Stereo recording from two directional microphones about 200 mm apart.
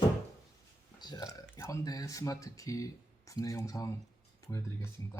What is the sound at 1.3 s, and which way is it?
Speech, 15° left (ahead or behind).